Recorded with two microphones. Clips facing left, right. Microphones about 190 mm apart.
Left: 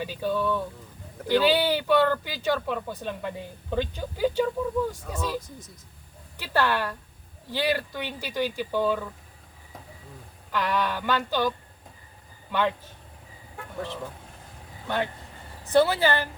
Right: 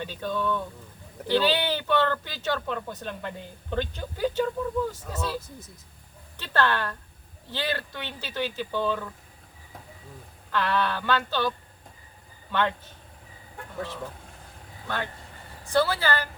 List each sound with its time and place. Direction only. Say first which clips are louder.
0.0 s speech: left 2 dB; 10° left (ahead or behind)
10.5 s speech: even; 15° left (ahead or behind)
13.7 s speech: left 1 dB; centre (ahead or behind)
15.7 s a woman's voice: left 3 dB; 20° left (ahead or behind)